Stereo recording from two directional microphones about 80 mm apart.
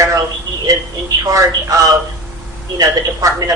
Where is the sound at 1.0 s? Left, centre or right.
Right.